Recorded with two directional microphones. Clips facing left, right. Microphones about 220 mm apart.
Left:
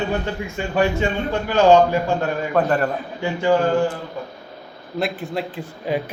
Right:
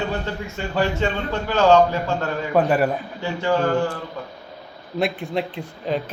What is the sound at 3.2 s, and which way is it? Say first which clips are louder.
Speech: left 3 dB; 15° left (ahead or behind).